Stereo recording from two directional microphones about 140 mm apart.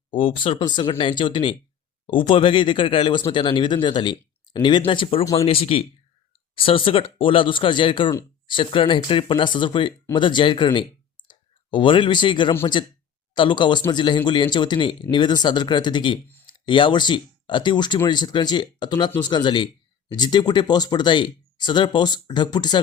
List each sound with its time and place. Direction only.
0.1 s speech: 35° left (ahead or behind)